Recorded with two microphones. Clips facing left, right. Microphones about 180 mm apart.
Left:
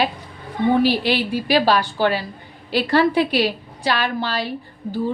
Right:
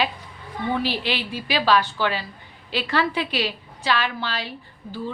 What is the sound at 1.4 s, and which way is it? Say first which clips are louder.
A woman's voice: left 2 dB; 40° left (ahead or behind).